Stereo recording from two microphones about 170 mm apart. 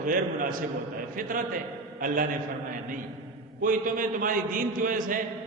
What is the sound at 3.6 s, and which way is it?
A man's voice, 55° right (ahead or behind).